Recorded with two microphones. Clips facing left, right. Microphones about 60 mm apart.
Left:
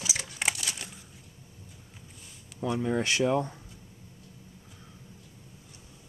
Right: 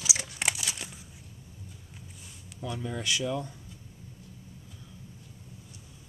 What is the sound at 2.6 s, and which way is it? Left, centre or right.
Speech, left.